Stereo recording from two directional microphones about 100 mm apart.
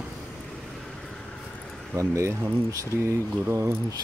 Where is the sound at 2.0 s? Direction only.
30° right (ahead or behind).